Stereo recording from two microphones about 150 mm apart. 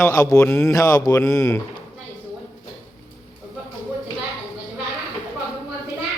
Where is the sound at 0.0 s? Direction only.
20° left (ahead or behind).